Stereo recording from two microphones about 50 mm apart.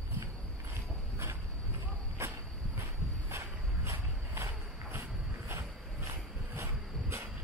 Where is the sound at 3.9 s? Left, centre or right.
Right.